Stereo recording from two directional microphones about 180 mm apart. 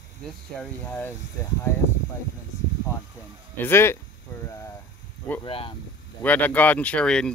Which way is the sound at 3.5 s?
10° left (ahead or behind).